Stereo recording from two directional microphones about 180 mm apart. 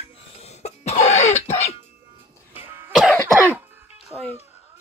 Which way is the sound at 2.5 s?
10° right (ahead or behind).